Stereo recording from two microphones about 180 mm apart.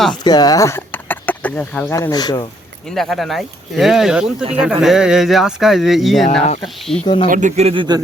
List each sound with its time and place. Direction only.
0.3 s speech: 20° left (ahead or behind)
2.9 s speech: centre (ahead or behind)
7.0 s speech: 30° left (ahead or behind)
7.3 s speech: 45° right (ahead or behind); by 8.0 s 25° right (ahead or behind)